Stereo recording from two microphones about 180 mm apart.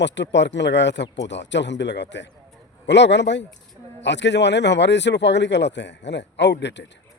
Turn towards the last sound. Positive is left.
turn(degrees=75)  # may be behind; listen again after turning